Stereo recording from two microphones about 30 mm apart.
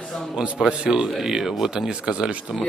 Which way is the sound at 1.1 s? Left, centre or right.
Centre.